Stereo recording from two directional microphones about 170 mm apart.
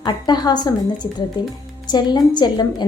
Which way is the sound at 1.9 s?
25° left (ahead or behind).